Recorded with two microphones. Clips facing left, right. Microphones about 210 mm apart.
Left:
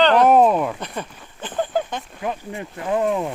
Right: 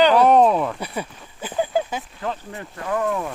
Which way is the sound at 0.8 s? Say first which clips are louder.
Right 1 dB; 10° right (ahead or behind).